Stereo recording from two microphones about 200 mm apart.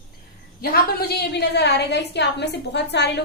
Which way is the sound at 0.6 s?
50° left (ahead or behind).